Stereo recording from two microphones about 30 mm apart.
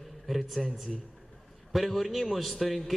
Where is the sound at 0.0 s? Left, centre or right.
Centre.